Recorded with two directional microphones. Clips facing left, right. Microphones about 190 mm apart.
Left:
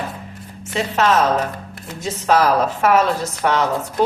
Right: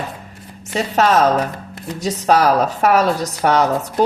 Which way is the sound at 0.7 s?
40° right (ahead or behind).